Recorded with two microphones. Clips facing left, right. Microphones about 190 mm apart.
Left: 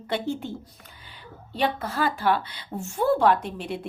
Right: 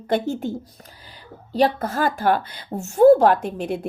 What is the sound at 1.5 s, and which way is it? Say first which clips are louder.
A woman's voice: right 6 dB; 45° right (ahead or behind).